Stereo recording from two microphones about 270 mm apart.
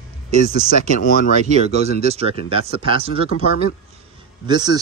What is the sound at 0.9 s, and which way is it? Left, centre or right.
Speech, left.